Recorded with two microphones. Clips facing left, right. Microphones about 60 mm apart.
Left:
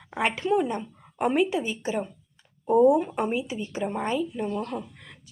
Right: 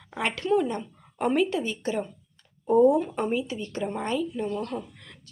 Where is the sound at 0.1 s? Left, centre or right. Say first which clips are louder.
Left 1 dB; centre.